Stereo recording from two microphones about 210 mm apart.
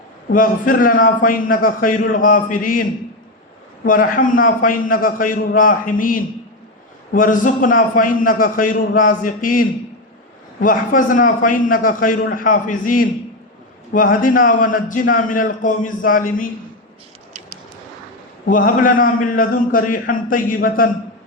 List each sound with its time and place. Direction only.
0.3 s a man's voice: 40° left (ahead or behind)
3.8 s a man's voice: 40° left (ahead or behind)
18.5 s a man's voice: 40° left (ahead or behind)